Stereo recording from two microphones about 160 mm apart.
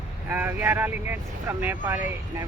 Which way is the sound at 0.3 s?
10° right (ahead or behind).